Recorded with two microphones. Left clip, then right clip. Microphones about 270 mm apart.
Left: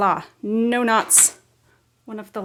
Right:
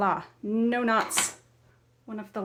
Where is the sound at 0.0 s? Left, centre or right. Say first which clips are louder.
Left 7 dB; left.